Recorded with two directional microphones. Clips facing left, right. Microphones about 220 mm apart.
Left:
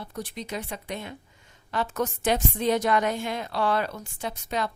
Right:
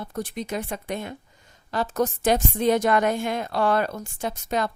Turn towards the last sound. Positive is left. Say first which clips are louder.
# right 4 dB
turn(degrees=-45)  # may be behind; listen again after turning